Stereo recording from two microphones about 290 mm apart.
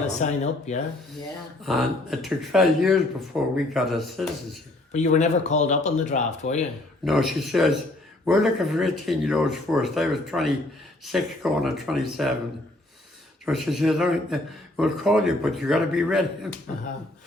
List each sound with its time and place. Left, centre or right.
0.2 s speech: left
1.6 s speech: centre
4.9 s speech: left
7.0 s speech: centre
13.4 s speech: centre